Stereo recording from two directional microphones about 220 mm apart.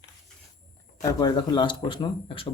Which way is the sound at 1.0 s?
15° left (ahead or behind).